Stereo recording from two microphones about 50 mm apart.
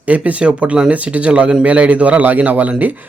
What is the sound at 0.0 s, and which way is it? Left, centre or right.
Speech, right.